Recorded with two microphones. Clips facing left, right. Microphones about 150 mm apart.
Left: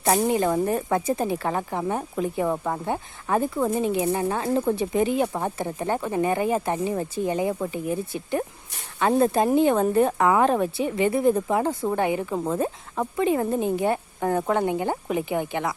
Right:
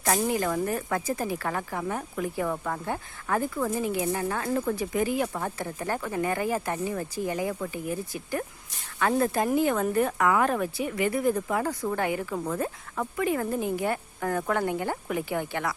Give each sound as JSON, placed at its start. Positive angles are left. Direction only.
{"t": 0.0, "sound": "speech", "side_deg": 25}